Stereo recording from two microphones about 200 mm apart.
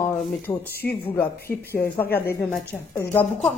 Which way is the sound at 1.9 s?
10° left (ahead or behind).